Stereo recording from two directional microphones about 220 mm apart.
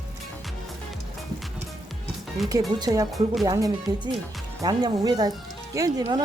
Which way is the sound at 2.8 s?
15° right (ahead or behind).